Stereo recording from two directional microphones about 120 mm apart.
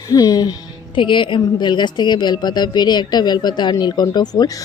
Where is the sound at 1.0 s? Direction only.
45° left (ahead or behind).